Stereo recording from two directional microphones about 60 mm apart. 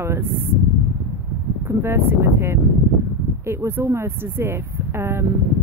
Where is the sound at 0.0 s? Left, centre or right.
Right.